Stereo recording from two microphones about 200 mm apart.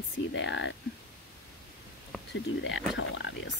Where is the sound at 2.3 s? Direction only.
65° left (ahead or behind).